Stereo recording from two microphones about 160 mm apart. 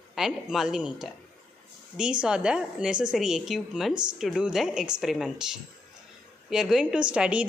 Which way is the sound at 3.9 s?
25° right (ahead or behind).